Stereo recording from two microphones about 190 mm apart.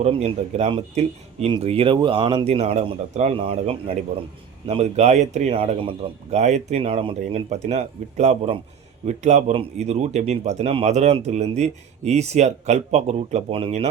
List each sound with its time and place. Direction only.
0.0 s speech: 30° right (ahead or behind)